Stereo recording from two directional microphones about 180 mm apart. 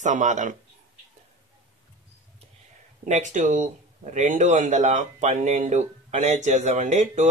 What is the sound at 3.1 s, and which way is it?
Speech, 45° right (ahead or behind).